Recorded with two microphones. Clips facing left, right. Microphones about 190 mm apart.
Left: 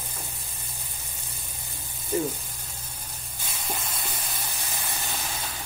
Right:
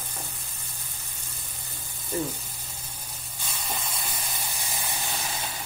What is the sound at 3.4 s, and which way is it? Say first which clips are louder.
Sizzle: even; centre (ahead or behind).